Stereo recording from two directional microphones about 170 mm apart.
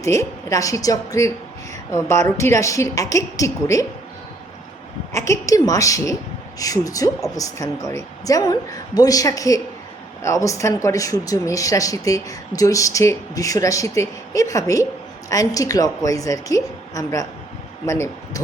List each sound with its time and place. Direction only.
0.0 s speech: 15° left (ahead or behind)
5.1 s speech: 15° left (ahead or behind)